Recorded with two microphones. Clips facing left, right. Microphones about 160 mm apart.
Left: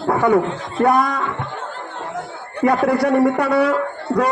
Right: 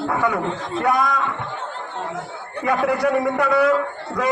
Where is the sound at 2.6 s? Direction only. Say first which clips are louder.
Left 4 dB; 35° left (ahead or behind).